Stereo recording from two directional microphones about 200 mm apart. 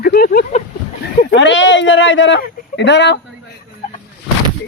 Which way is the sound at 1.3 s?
65° left (ahead or behind).